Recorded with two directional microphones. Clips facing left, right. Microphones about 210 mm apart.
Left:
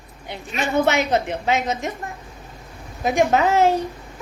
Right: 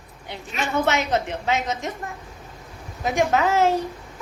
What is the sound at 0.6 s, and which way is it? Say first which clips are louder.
A woman's voice: left 3 dB; 15° left (ahead or behind).